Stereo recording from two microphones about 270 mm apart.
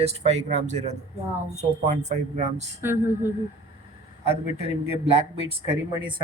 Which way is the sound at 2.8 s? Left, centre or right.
Centre.